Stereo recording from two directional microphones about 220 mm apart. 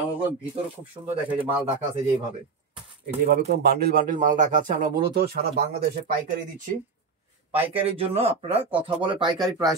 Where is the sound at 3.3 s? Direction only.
45° right (ahead or behind).